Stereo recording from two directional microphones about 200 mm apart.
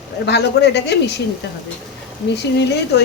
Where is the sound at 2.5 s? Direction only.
60° left (ahead or behind).